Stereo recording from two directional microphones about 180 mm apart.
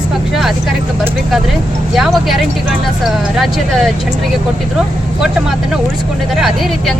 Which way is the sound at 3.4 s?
Centre (ahead or behind).